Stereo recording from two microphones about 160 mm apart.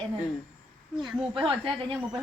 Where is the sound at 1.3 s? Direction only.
35° right (ahead or behind).